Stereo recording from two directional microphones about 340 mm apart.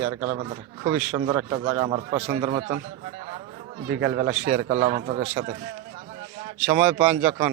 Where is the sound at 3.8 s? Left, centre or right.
Right.